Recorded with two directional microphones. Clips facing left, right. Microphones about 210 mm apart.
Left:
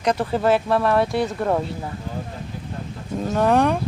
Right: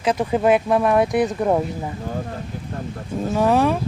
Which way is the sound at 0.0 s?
10° right (ahead or behind).